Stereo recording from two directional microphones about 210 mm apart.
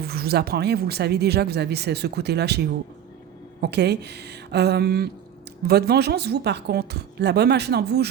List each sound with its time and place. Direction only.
0.0 s speech: 50° right (ahead or behind)